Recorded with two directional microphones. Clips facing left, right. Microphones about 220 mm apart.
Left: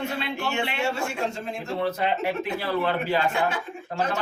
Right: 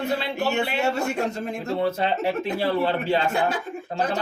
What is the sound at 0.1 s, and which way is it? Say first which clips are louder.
Speech: right 4 dB; 35° right (ahead or behind).